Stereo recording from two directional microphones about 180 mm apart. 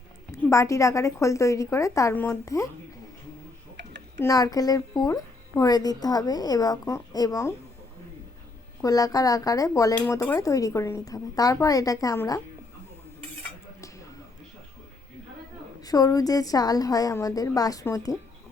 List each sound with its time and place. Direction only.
0.3 s a woman's voice: 15° left (ahead or behind)
4.2 s a woman's voice: 20° left (ahead or behind)
8.8 s a woman's voice: 20° left (ahead or behind)
15.8 s a woman's voice: 20° left (ahead or behind)